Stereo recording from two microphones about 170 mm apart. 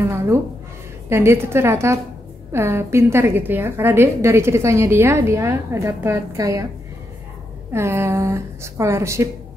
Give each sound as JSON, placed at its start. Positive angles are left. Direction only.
{"t": 0.0, "sound": "a woman's voice", "side_deg": -15}
{"t": 7.7, "sound": "a woman's voice", "side_deg": -15}